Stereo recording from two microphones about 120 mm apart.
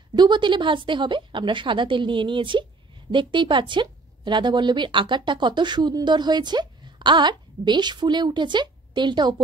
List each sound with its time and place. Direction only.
0.1 s a woman's voice: 40° right (ahead or behind)